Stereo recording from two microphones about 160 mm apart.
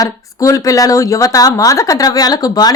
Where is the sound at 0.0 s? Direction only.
20° left (ahead or behind).